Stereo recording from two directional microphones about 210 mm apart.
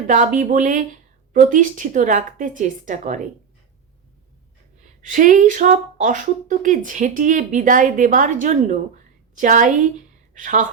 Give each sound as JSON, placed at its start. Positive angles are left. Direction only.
{"t": 0.1, "sound": "speech", "side_deg": -40}
{"t": 5.0, "sound": "a woman's voice", "side_deg": -40}